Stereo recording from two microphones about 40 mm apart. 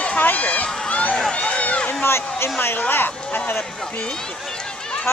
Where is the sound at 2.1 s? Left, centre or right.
Left.